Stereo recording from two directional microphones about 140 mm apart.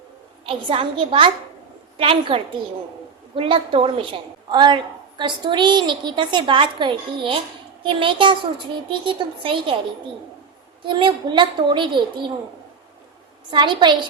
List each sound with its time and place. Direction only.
0.4 s a woman's voice: 40° right (ahead or behind)
10.8 s a woman's voice: 35° right (ahead or behind)
13.5 s a woman's voice: 35° right (ahead or behind)